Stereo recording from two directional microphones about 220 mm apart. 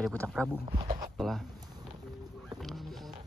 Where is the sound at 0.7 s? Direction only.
25° right (ahead or behind).